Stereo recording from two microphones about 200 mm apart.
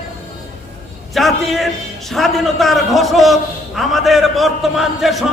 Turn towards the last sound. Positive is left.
turn(degrees=0)  # may be behind; listen again after turning